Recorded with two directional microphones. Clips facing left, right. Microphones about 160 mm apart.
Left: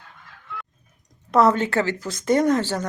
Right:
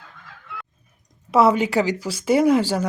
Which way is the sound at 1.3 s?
10° right (ahead or behind).